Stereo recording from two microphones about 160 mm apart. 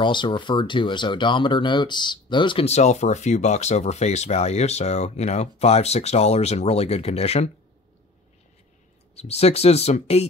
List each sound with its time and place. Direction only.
0.0 s speech: 30° left (ahead or behind)
9.1 s speech: 40° left (ahead or behind)